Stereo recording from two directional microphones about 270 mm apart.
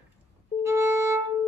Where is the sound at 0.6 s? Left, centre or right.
Centre.